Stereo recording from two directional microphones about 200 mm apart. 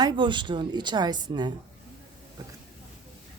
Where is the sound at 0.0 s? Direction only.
25° right (ahead or behind).